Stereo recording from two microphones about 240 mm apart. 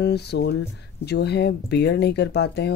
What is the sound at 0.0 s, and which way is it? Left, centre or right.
Speech, left.